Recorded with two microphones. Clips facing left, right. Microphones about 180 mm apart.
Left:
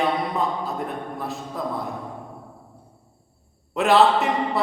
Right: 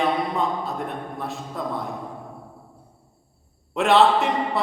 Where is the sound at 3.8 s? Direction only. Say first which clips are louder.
Even; centre (ahead or behind).